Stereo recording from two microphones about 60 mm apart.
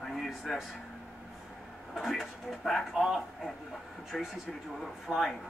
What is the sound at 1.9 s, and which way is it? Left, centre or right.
Speech, centre.